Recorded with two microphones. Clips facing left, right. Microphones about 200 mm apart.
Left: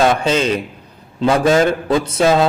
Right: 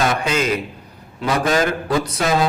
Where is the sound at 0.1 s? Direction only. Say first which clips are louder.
Left 4 dB; 30° left (ahead or behind).